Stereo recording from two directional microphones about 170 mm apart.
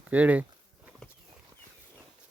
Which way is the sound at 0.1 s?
10° right (ahead or behind).